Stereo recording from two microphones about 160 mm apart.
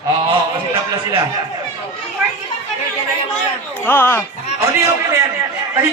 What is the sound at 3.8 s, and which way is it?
Speech, 10° left (ahead or behind).